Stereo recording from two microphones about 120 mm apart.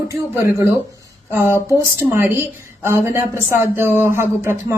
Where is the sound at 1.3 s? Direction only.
20° right (ahead or behind).